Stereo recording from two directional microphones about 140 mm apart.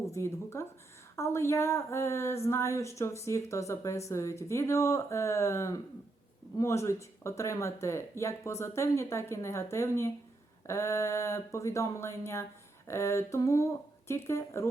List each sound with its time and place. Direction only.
0.1 s a woman's voice: 20° left (ahead or behind)